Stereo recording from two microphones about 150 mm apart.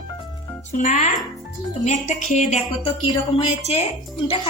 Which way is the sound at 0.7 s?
55° left (ahead or behind).